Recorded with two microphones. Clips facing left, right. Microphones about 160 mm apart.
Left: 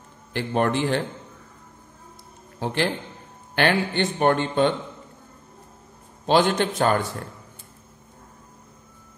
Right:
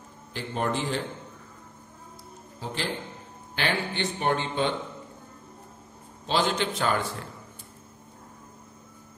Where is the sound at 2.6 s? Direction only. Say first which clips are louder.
Left 7 dB; 65° left (ahead or behind).